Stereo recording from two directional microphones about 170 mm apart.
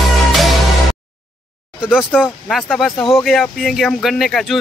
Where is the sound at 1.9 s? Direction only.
10° left (ahead or behind).